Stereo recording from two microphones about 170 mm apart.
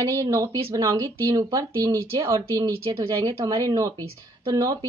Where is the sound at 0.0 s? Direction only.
20° right (ahead or behind).